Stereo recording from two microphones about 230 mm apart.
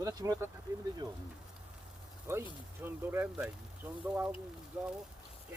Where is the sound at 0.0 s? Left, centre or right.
Centre.